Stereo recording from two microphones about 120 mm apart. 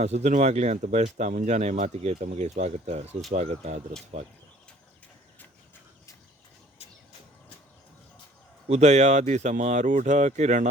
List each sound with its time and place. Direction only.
0.0 s speech: 70° right (ahead or behind)
8.7 s speech: 70° right (ahead or behind)